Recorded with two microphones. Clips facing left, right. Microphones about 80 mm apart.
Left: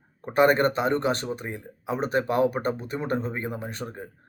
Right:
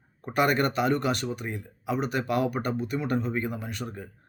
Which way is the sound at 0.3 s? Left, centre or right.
Left.